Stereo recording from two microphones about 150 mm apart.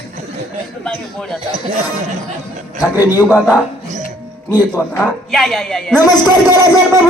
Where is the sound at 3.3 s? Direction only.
5° right (ahead or behind).